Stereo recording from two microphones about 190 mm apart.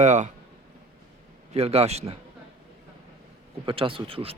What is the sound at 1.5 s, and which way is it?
Speech, 35° right (ahead or behind).